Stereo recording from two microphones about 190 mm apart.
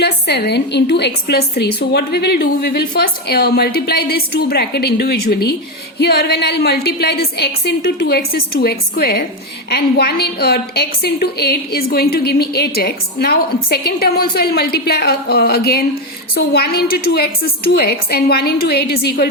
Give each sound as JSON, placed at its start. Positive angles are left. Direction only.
{"t": 0.0, "sound": "a woman's voice", "side_deg": 60}